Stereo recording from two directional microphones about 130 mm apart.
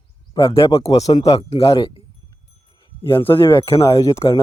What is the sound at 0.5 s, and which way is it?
Speech, 20° left (ahead or behind).